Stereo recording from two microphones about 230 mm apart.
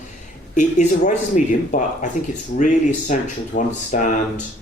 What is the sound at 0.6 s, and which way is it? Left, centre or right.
Speech, left.